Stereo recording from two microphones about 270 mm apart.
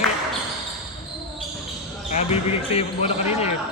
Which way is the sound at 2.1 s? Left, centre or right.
Left.